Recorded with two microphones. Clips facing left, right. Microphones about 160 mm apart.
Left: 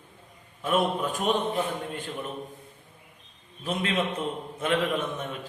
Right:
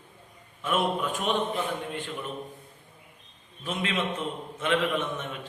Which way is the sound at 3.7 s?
40° left (ahead or behind).